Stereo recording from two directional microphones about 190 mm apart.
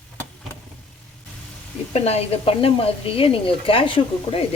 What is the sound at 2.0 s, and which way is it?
Speech, 30° left (ahead or behind).